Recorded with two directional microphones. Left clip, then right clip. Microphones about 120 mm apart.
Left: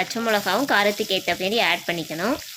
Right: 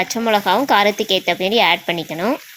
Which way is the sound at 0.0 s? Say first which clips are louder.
Right 5 dB; 35° right (ahead or behind).